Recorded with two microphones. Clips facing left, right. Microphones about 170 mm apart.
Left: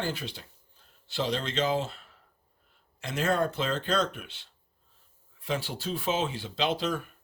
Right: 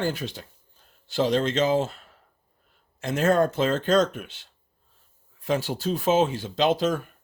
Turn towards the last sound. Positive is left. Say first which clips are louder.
# right 7 dB
turn(degrees=-45)  # may be behind; listen again after turning